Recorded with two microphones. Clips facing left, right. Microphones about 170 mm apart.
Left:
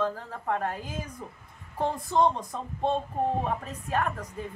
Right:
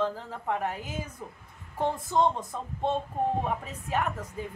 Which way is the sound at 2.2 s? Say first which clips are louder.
Left 1 dB; 15° left (ahead or behind).